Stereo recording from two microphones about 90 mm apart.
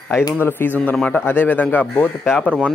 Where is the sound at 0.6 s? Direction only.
25° left (ahead or behind).